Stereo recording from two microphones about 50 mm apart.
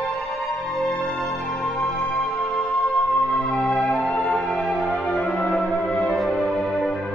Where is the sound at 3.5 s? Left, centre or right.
Left.